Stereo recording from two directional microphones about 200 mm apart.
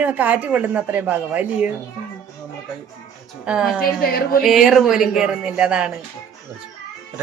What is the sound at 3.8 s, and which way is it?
Speech, 50° left (ahead or behind).